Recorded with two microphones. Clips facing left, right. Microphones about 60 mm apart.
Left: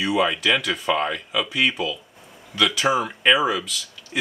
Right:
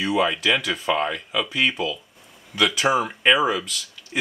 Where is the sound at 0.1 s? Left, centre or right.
Centre.